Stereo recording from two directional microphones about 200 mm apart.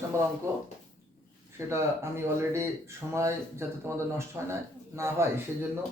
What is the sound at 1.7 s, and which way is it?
Speech, 15° right (ahead or behind).